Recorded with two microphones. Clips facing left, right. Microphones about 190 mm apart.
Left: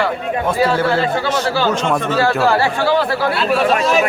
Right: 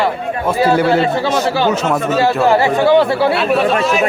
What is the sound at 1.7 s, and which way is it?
Speech, 5° right (ahead or behind).